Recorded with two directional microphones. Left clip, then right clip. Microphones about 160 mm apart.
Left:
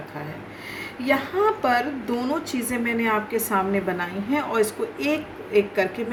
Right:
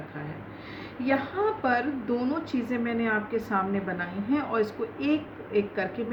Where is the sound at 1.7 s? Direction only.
40° left (ahead or behind).